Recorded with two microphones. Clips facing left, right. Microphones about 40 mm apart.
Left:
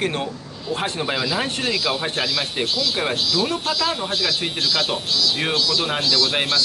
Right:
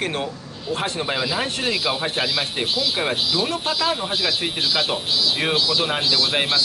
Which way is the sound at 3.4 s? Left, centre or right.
Centre.